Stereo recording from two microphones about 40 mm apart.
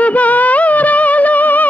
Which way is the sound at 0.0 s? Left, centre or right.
Left.